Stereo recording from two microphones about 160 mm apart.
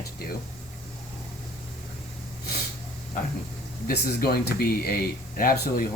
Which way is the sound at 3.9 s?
70° left (ahead or behind).